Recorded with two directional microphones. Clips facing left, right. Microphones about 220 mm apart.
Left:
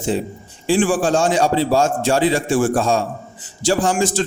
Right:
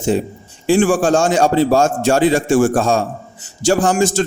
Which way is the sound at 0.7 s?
45° right (ahead or behind).